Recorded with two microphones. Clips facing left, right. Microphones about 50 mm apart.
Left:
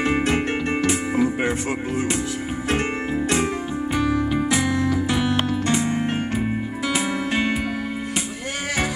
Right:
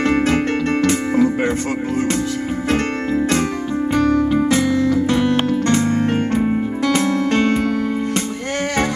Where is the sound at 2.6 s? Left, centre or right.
Centre.